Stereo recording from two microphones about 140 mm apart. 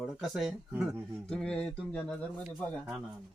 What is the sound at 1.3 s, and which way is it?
Speech, 5° left (ahead or behind).